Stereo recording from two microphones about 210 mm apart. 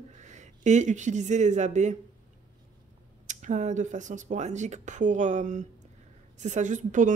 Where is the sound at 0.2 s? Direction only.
35° right (ahead or behind).